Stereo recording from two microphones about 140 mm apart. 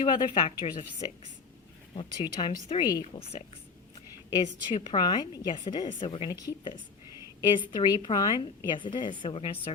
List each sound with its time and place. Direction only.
0.0 s a woman's voice: 35° left (ahead or behind)
2.0 s a woman's voice: 30° left (ahead or behind)
4.4 s a woman's voice: 35° left (ahead or behind)